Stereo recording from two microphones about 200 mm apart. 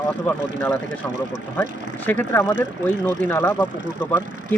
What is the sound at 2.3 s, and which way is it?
Speech, 10° left (ahead or behind).